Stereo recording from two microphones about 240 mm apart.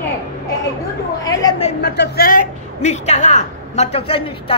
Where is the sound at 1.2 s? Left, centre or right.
Centre.